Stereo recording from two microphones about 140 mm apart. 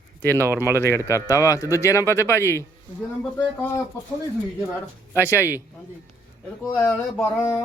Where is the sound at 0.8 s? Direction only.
20° left (ahead or behind).